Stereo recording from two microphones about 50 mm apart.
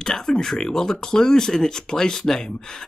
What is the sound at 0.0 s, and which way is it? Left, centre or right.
Speech, centre.